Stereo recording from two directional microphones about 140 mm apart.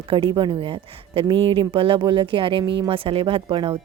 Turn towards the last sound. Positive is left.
turn(degrees=-35)  # may be behind; listen again after turning